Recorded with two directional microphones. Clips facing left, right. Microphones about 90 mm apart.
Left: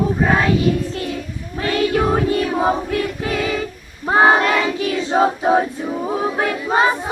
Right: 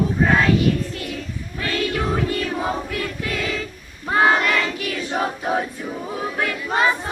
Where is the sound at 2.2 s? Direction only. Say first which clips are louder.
Left 6 dB; 20° left (ahead or behind).